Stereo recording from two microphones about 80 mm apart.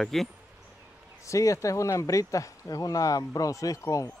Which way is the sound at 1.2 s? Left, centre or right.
Left.